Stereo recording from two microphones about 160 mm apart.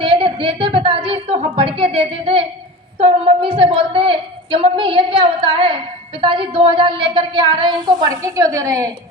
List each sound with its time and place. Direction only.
0.0 s a woman's voice: 35° right (ahead or behind)
8.2 s a woman's voice: 20° right (ahead or behind)